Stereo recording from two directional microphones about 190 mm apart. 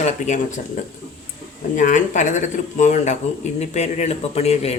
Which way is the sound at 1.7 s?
40° left (ahead or behind).